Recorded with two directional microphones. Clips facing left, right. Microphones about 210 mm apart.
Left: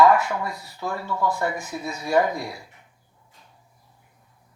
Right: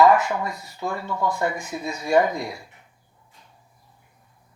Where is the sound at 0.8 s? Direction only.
20° right (ahead or behind).